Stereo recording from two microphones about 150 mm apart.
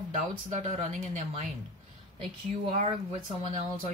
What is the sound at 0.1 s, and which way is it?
Speech, 55° right (ahead or behind).